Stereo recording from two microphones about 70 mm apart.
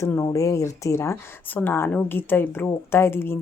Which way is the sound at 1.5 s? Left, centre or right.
Left.